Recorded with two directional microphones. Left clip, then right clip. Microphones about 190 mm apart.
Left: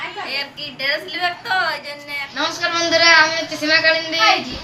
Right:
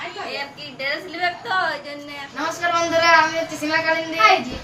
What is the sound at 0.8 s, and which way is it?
Speech, 20° right (ahead or behind).